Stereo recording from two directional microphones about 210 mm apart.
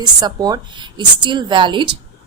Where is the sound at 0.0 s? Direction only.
20° right (ahead or behind).